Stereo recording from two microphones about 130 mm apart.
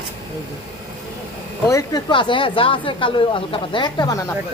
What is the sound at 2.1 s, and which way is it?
A woman's voice, 40° left (ahead or behind).